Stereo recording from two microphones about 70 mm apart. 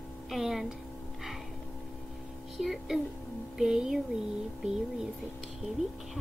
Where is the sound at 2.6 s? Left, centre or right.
Centre.